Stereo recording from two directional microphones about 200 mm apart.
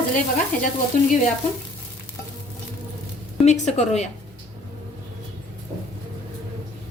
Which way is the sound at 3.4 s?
35° left (ahead or behind).